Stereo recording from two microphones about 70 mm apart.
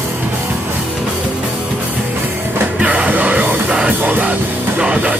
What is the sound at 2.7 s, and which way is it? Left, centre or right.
Music, centre.